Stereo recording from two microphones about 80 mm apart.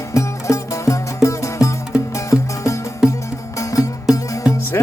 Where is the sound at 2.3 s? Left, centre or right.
Left.